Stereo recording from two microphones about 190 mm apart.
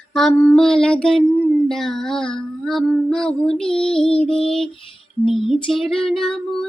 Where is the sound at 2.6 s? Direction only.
Centre (ahead or behind).